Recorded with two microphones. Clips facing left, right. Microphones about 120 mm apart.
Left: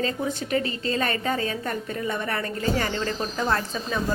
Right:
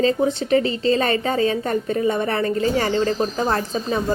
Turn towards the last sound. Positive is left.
turn(degrees=-30)  # may be behind; listen again after turning